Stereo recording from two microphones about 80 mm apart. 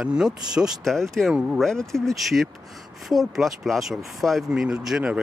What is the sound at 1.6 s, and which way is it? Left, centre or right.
Speech, centre.